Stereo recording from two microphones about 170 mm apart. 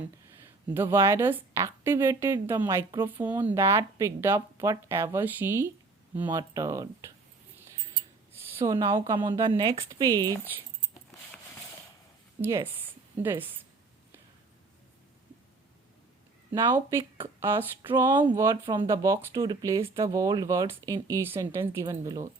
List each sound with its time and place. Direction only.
0.7 s a woman's voice: 15° right (ahead or behind)
8.6 s speech: 25° right (ahead or behind)
12.4 s a woman's voice: 15° right (ahead or behind)
16.5 s a woman's voice: 15° right (ahead or behind)